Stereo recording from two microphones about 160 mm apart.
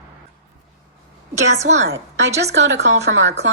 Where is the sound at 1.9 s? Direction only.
90° right.